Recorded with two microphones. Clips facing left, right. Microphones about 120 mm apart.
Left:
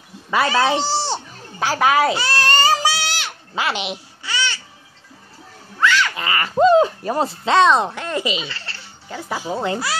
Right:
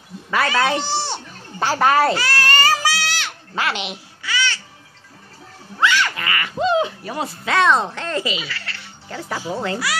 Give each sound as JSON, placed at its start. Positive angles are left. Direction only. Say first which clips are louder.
{"t": 0.3, "sound": "speech", "louder": "left 2 dB", "side_deg": 25}
{"t": 1.6, "sound": "a woman's voice", "louder": "even", "side_deg": 5}
{"t": 2.1, "sound": "a sound", "louder": "left 1 dB", "side_deg": 25}
{"t": 5.8, "sound": "a sound", "louder": "left 1 dB", "side_deg": -15}
{"t": 6.1, "sound": "speech", "louder": "left 2 dB", "side_deg": 25}
{"t": 6.4, "sound": "speech", "louder": "left 6 dB", "side_deg": 40}
{"t": 9.1, "sound": "a child's voice", "louder": "left 1 dB", "side_deg": 15}